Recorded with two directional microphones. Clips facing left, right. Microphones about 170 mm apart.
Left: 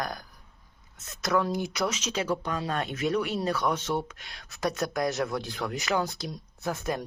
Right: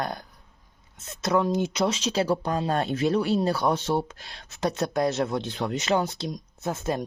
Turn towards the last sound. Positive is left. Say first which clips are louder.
# right 3 dB
turn(degrees=-25)  # may be behind; listen again after turning